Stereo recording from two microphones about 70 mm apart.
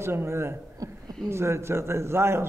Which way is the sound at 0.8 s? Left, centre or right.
Right.